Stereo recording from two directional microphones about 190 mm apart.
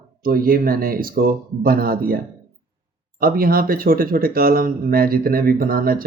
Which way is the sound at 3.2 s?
50° right (ahead or behind).